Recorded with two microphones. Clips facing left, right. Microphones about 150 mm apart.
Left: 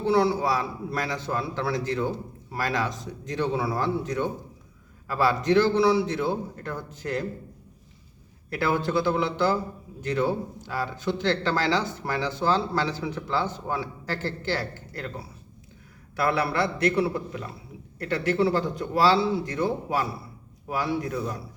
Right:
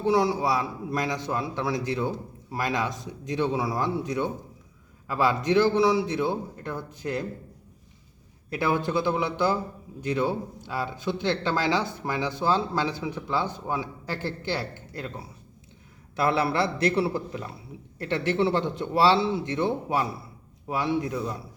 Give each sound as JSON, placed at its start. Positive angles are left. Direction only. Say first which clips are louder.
{"t": 0.0, "sound": "speech", "louder": "left 1 dB", "side_deg": -15}
{"t": 8.4, "sound": "speech", "louder": "even", "side_deg": -15}
{"t": 16.1, "sound": "a man's voice", "louder": "right 1 dB", "side_deg": -25}